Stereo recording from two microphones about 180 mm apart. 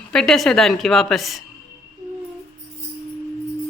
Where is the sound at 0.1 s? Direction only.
5° left (ahead or behind).